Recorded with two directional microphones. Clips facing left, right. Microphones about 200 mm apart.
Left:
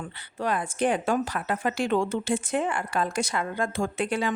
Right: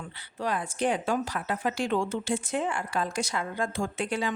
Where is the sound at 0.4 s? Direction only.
55° left (ahead or behind).